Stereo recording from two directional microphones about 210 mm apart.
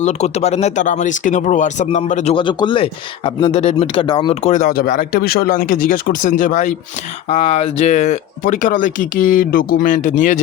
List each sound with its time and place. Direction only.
0.0 s speech: 30° left (ahead or behind)